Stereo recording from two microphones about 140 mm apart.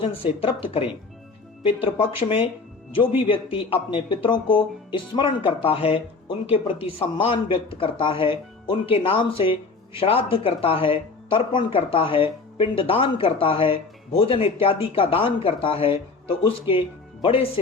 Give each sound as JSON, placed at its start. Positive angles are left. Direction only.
{"t": 0.0, "sound": "speech", "side_deg": 40}